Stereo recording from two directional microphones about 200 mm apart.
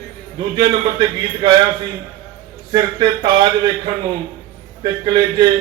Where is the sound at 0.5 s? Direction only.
20° right (ahead or behind).